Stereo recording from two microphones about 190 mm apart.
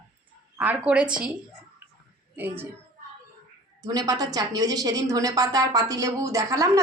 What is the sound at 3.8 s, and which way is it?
A woman's voice, 20° right (ahead or behind).